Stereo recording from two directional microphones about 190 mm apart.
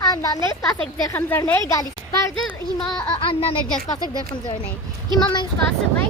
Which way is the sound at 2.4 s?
Centre (ahead or behind).